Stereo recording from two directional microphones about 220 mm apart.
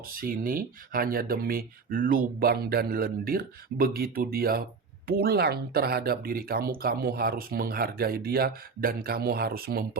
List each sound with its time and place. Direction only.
0.2 s speech: 40° right (ahead or behind)